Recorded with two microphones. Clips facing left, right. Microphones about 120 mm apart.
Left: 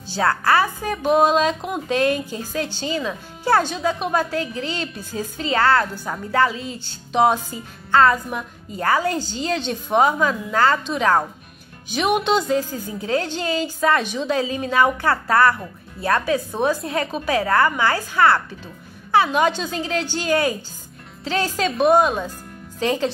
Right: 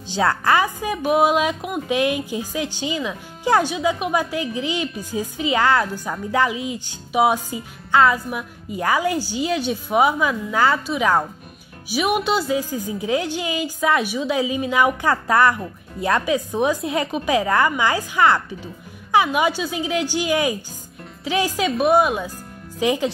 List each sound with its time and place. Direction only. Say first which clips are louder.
0.1 s a woman's voice: even; 20° right (ahead or behind)